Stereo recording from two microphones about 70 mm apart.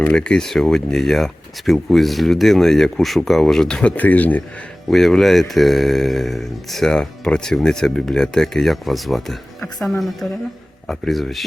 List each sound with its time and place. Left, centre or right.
0.0 s speech: centre
3.9 s speech: left
4.9 s speech: centre
10.8 s speech: centre